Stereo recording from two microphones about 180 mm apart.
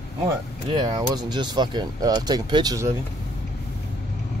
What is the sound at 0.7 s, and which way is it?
Speech, 25° right (ahead or behind).